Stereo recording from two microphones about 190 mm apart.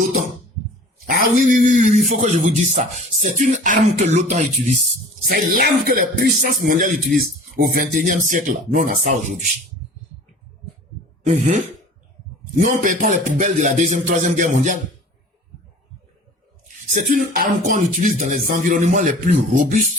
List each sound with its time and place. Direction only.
1.0 s speech: 45° right (ahead or behind)
5.3 s speech: 50° right (ahead or behind)
11.2 s a sound: 40° right (ahead or behind)
12.5 s speech: 45° right (ahead or behind)
16.6 s speech: 45° right (ahead or behind)